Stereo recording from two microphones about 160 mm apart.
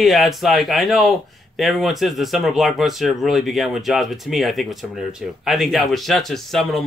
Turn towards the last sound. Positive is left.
turn(degrees=0)  # may be behind; listen again after turning